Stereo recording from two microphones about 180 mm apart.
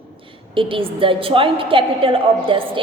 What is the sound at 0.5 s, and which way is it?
Speech, 30° right (ahead or behind).